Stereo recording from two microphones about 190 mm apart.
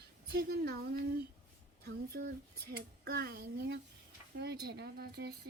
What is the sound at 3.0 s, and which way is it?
A woman's voice, 50° right (ahead or behind).